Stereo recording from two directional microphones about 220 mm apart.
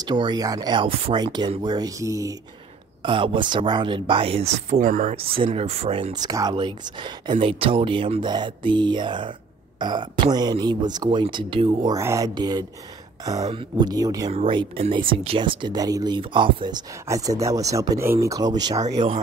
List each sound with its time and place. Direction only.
0.0 s speech: 20° right (ahead or behind); by 5.1 s 35° right (ahead or behind)
5.1 s speech: 25° right (ahead or behind)